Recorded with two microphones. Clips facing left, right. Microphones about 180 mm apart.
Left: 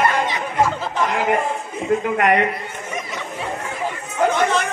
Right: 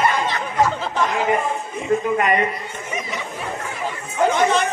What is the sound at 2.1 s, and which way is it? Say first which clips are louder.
Speech: left 2 dB; 65° left (ahead or behind).